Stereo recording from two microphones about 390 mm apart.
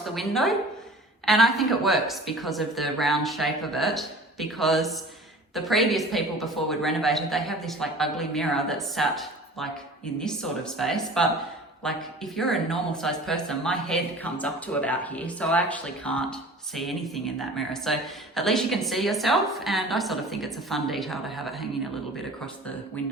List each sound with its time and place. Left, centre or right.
0.1 s a woman's voice: centre
23.0 s speech: centre